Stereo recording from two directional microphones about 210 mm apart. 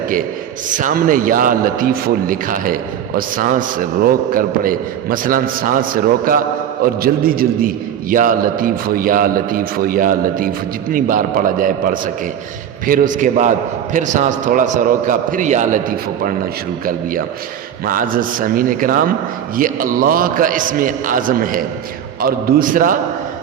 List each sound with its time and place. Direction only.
0.8 s a man's voice: 40° right (ahead or behind)